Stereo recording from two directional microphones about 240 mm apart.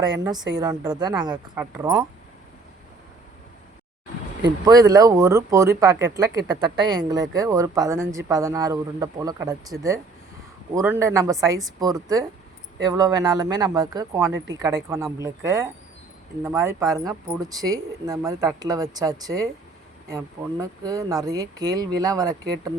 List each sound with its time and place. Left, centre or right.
0.1 s speech: centre
4.6 s speech: centre